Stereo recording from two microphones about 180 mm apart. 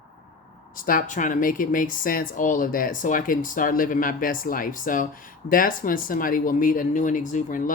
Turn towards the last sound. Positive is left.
turn(degrees=45)  # may be behind; listen again after turning